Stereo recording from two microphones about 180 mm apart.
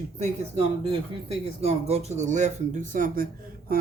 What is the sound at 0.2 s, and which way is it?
Speech, 30° right (ahead or behind).